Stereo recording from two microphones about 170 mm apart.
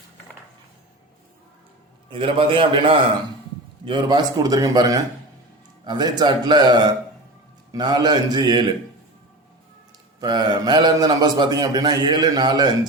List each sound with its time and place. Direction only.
2.0 s a man's voice: 30° right (ahead or behind)
10.2 s a man's voice: 25° right (ahead or behind)